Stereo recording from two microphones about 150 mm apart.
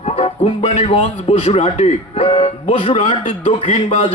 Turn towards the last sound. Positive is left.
turn(degrees=55)  # may be behind; listen again after turning